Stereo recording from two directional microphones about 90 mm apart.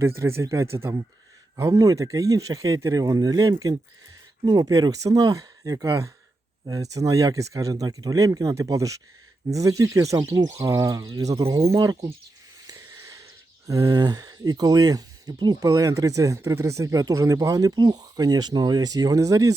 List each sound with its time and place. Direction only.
0.0 s speech: 30° right (ahead or behind)
10.2 s speech: 45° right (ahead or behind)
10.6 s speech: 35° right (ahead or behind)
12.6 s a sound: 40° right (ahead or behind)
13.7 s speech: 40° right (ahead or behind)
15.7 s speech: 35° right (ahead or behind)